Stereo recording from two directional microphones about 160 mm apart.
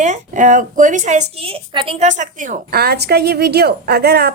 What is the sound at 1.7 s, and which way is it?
Speech, 30° right (ahead or behind).